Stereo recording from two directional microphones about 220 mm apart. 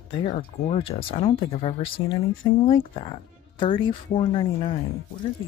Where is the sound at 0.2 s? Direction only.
25° left (ahead or behind).